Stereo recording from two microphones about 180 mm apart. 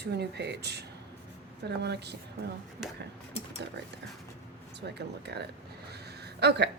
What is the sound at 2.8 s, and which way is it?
Speech, 5° right (ahead or behind).